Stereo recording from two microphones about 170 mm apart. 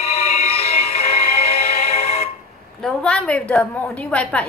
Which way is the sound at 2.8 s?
5° left (ahead or behind).